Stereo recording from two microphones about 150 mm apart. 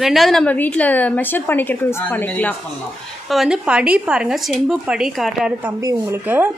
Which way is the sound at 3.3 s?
5° right (ahead or behind).